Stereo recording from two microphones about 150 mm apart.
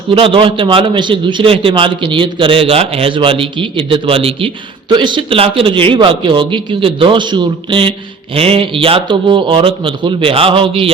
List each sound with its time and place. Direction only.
0.1 s a man's voice: 35° right (ahead or behind)